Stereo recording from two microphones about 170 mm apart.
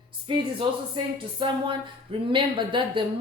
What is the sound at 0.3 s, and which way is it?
A woman's voice, 30° right (ahead or behind).